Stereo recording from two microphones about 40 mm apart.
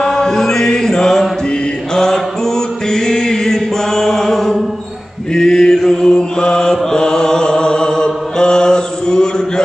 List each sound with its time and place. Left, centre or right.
0.0 s chant: centre
5.3 s mantra: centre